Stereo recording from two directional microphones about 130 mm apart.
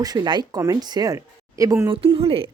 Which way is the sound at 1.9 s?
45° right (ahead or behind).